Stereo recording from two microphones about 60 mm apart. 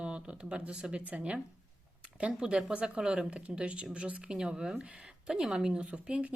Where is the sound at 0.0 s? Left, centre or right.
Centre.